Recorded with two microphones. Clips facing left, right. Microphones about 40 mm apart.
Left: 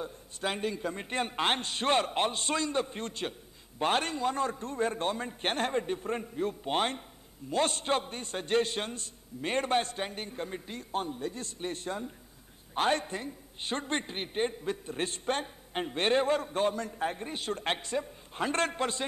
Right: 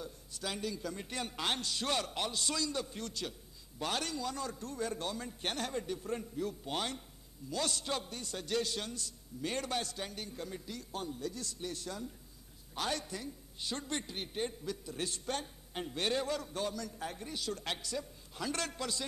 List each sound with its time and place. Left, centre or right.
0.0 s a man's voice: left